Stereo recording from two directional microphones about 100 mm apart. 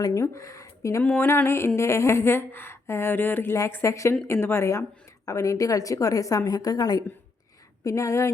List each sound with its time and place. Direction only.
0.0 s speech: 30° left (ahead or behind)
1.0 s a woman's voice: 20° left (ahead or behind)